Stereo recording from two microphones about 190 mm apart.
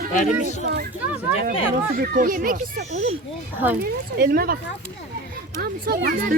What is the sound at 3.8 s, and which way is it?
Speech, 60° right (ahead or behind).